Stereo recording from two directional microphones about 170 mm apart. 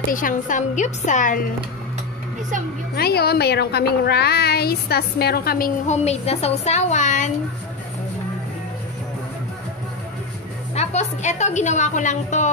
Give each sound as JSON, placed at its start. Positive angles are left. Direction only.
{"t": 0.1, "sound": "a woman's voice", "side_deg": 50}
{"t": 3.0, "sound": "a woman's voice", "side_deg": 65}
{"t": 5.9, "sound": "a woman's voice", "side_deg": 40}
{"t": 10.7, "sound": "a woman's voice", "side_deg": 40}